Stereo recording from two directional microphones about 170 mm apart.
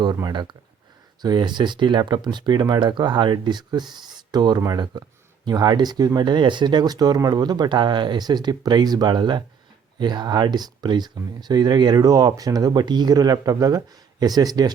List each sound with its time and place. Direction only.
0.0 s speech: 25° right (ahead or behind)